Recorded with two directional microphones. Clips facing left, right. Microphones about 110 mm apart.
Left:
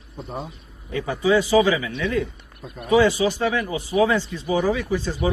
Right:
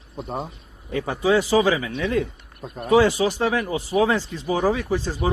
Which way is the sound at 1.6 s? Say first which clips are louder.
Even; 35° right (ahead or behind).